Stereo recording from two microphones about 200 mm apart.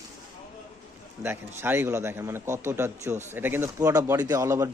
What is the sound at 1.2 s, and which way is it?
Speech, 10° right (ahead or behind).